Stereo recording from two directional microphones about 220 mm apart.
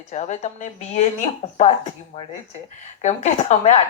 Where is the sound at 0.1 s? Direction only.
30° left (ahead or behind).